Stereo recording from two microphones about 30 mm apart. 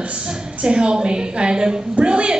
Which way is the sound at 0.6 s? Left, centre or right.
Right.